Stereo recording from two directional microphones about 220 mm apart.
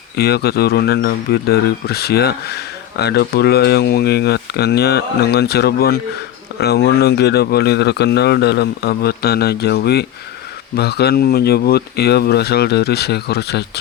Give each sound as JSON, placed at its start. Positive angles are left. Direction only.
{"t": 0.2, "sound": "speech", "side_deg": 45}